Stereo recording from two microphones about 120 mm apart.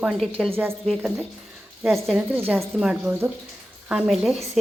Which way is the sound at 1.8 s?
Centre (ahead or behind).